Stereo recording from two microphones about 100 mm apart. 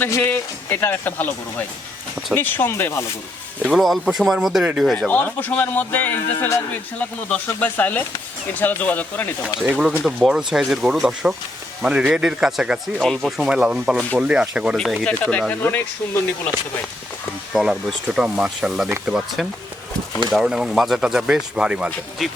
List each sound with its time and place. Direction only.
0.0 s speech: 20° left (ahead or behind)
3.7 s speech: centre (ahead or behind)
4.9 s a man's voice: 15° left (ahead or behind)
10.0 s a man's voice: 5° right (ahead or behind)
15.0 s a man's voice: 10° left (ahead or behind)
17.5 s speech: 5° right (ahead or behind)